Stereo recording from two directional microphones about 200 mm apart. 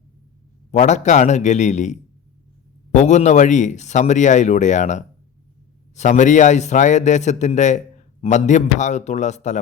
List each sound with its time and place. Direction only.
0.7 s a man's voice: 35° left (ahead or behind)